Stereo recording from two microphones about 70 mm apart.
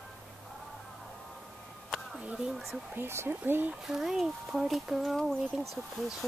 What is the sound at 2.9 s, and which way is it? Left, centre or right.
Speech, right.